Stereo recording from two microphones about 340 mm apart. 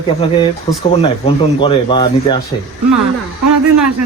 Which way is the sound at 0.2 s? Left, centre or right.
Centre.